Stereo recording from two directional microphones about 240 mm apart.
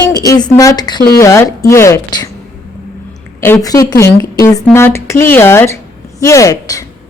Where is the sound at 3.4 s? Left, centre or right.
Centre.